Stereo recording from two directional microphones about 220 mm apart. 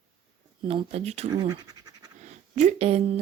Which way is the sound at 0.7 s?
25° right (ahead or behind).